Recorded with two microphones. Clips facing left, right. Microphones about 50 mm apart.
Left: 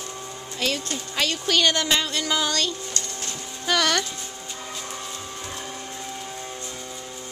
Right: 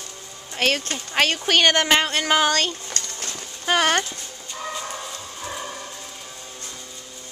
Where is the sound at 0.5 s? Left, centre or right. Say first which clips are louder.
Right 4 dB; right.